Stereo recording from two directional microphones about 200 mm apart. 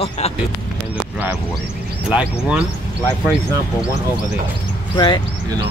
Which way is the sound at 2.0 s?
5° right (ahead or behind).